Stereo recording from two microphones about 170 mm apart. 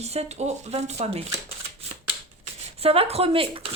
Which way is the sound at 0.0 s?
40° right (ahead or behind).